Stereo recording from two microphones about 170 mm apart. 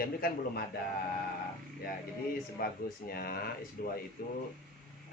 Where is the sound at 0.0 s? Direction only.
60° left (ahead or behind).